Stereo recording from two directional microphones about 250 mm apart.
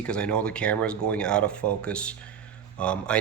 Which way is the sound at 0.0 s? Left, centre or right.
Centre.